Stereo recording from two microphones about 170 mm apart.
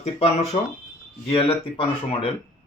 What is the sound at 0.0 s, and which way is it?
Speech, 40° left (ahead or behind).